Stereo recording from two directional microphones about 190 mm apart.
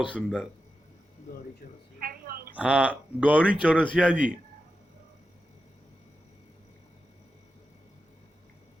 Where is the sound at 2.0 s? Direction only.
50° right (ahead or behind).